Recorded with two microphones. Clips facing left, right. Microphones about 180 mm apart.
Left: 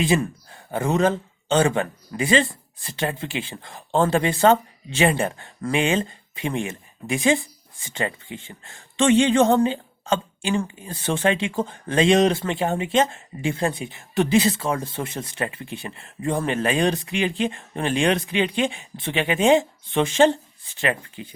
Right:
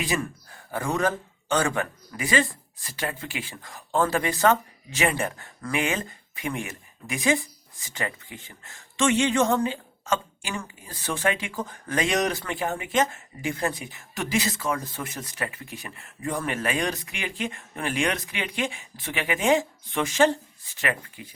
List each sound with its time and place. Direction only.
0.0 s speech: 25° left (ahead or behind)